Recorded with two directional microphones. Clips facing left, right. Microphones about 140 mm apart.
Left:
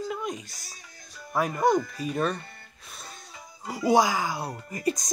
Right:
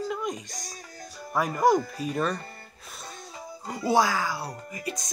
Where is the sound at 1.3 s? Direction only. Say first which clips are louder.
Right 1 dB; centre (ahead or behind).